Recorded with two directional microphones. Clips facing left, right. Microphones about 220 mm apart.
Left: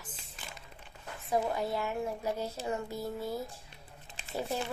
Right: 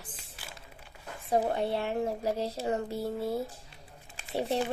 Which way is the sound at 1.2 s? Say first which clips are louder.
Right 3 dB; 30° right (ahead or behind).